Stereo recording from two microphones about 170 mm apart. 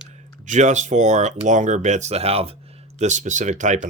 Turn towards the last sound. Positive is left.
turn(degrees=-45)  # may be behind; listen again after turning